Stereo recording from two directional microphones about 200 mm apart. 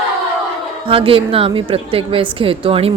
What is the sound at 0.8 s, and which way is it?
A woman's voice, 25° right (ahead or behind).